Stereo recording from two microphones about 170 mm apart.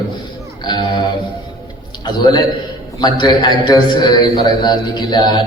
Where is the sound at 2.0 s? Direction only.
25° left (ahead or behind).